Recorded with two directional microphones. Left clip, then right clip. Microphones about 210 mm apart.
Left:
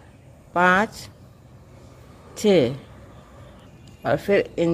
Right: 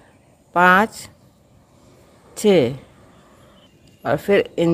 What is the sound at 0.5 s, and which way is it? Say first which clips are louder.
Speech: right 4 dB; 15° right (ahead or behind).